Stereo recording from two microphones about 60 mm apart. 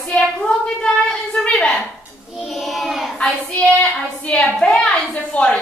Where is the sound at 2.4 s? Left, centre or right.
Centre.